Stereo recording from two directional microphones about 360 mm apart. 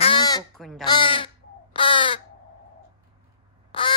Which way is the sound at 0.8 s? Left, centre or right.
Centre.